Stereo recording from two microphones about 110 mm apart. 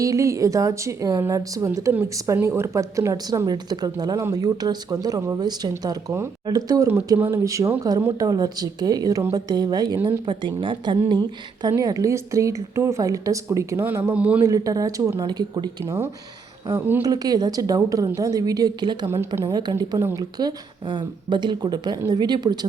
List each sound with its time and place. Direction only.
0.0 s speech: 30° right (ahead or behind)
7.2 s speech: 25° right (ahead or behind)
14.1 s speech: 15° right (ahead or behind)
14.4 s speech: 30° right (ahead or behind)
15.2 s speech: 40° right (ahead or behind)
15.8 s speech: 20° right (ahead or behind)
17.0 s speech: 35° right (ahead or behind)
20.0 s speech: 25° right (ahead or behind)
20.4 s speech: 40° right (ahead or behind)